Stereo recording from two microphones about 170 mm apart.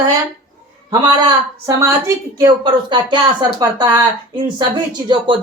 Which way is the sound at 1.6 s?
20° right (ahead or behind).